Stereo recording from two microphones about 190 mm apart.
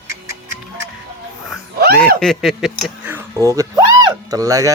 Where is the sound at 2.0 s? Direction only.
5° left (ahead or behind); by 4.7 s 20° right (ahead or behind).